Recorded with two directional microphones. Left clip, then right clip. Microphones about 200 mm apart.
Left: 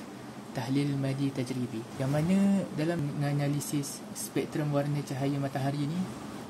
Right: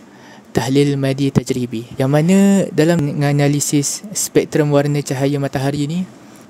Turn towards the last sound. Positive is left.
turn(degrees=-55)  # may be behind; listen again after turning